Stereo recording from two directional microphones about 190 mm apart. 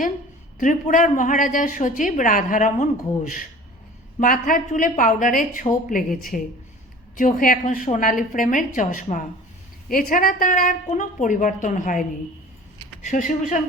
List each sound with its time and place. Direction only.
0.6 s a woman's voice: 45° left (ahead or behind)
4.2 s a woman's voice: 45° left (ahead or behind)